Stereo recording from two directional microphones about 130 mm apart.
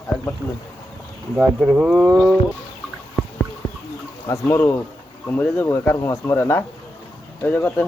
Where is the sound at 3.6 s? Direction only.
15° left (ahead or behind).